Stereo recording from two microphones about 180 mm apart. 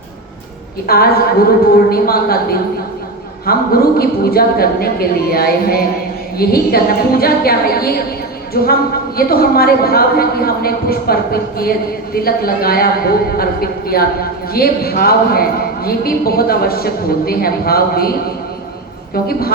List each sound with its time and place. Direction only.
0.9 s a woman's voice: 60° left (ahead or behind)
19.1 s a woman's voice: 55° left (ahead or behind)